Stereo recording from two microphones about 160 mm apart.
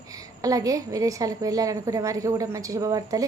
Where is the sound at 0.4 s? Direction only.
20° right (ahead or behind).